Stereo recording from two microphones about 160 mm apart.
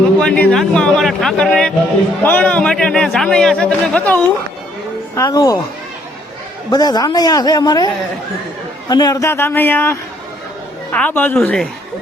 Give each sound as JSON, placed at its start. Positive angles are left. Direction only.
{"t": 0.2, "sound": "a man's voice", "side_deg": 5}
{"t": 5.1, "sound": "a man's voice", "side_deg": 20}
{"t": 6.7, "sound": "a man's voice", "side_deg": 25}
{"t": 8.9, "sound": "a man's voice", "side_deg": 25}